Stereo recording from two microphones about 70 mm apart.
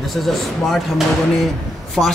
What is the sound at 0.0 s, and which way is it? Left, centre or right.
Speech, centre.